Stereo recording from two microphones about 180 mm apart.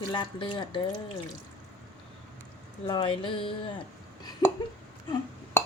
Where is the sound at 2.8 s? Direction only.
25° left (ahead or behind).